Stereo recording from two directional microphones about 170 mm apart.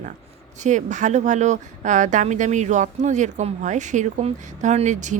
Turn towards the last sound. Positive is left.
turn(degrees=-45)  # may be behind; listen again after turning